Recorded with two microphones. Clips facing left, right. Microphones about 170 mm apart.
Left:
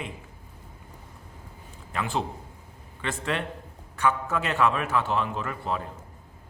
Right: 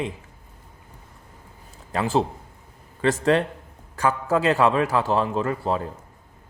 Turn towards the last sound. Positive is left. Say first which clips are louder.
# right 6 dB
turn(degrees=-35)  # may be behind; listen again after turning